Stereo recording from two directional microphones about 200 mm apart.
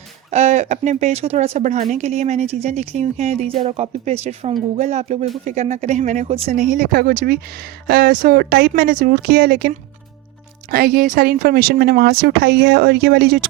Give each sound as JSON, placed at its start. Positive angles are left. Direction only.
{"t": 0.3, "sound": "speech", "side_deg": -35}